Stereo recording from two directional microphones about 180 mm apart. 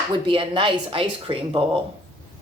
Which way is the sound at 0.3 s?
25° right (ahead or behind).